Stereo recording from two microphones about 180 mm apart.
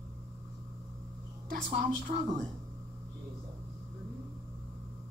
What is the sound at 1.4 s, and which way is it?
Speech, 45° right (ahead or behind).